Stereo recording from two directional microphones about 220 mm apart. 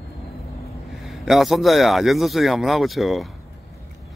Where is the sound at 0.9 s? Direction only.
Centre (ahead or behind).